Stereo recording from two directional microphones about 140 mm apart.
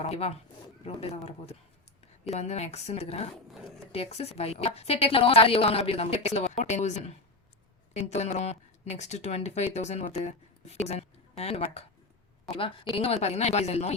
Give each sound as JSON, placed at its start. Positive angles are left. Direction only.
{"t": 0.0, "sound": "speech", "side_deg": 45}
{"t": 12.9, "sound": "speech", "side_deg": 45}